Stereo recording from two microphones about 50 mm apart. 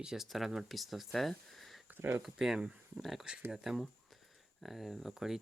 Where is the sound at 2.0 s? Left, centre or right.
Right.